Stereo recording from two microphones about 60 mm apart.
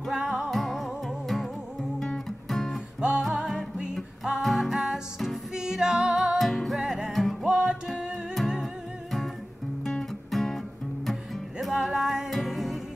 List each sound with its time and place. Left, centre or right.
0.1 s music: centre
0.5 s music: centre
3.0 s music: centre
6.8 s music: centre
7.1 s music: centre
7.4 s music: centre
9.8 s music: centre
11.6 s music: centre